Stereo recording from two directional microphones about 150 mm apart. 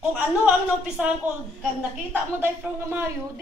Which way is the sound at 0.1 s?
5° right (ahead or behind).